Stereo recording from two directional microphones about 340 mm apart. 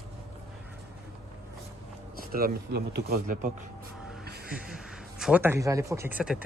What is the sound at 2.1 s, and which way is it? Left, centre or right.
Speech, right.